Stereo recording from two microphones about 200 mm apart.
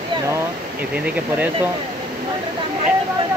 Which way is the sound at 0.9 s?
5° right (ahead or behind).